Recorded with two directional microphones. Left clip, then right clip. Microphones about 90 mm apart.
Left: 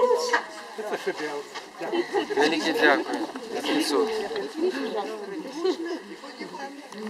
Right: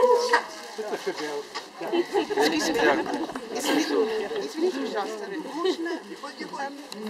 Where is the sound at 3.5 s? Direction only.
35° right (ahead or behind).